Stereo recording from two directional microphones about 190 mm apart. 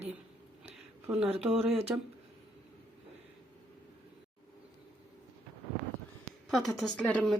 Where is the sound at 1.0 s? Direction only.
5° right (ahead or behind).